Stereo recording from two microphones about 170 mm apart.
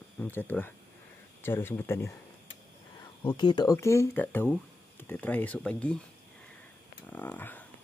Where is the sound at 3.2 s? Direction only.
25° left (ahead or behind); by 6.0 s 5° left (ahead or behind).